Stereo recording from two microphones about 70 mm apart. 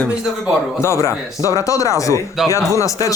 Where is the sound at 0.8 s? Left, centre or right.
Left.